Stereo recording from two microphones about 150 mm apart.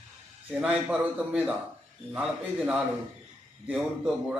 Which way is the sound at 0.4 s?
5° right (ahead or behind).